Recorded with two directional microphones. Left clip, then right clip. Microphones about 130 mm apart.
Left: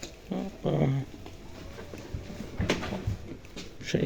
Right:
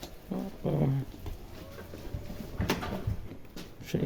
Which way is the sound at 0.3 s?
20° right (ahead or behind).